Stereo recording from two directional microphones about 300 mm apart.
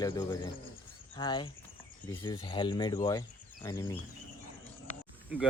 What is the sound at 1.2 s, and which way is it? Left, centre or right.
Speech, centre.